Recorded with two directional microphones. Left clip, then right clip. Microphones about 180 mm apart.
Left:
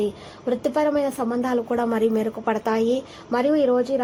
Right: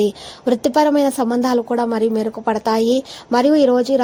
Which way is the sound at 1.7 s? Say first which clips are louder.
Right 4 dB; 20° right (ahead or behind).